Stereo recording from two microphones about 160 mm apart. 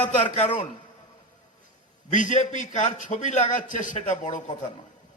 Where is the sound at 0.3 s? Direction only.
40° left (ahead or behind).